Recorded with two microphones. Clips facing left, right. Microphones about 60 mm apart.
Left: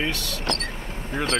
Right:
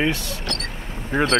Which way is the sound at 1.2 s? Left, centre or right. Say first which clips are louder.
Right 6 dB; right.